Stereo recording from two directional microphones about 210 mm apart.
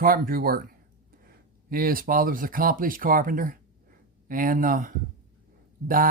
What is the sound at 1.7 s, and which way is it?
Speech, 45° right (ahead or behind).